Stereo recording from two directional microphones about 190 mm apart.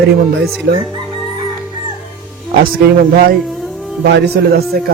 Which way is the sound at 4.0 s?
60° right (ahead or behind).